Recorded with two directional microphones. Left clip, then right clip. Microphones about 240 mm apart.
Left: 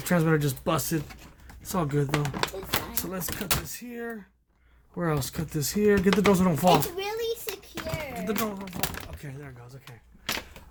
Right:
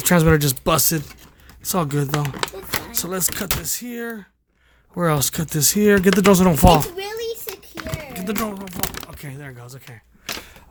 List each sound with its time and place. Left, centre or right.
0.0 s speech: right
2.0 s speech: right
2.9 s speech: right
8.1 s speech: right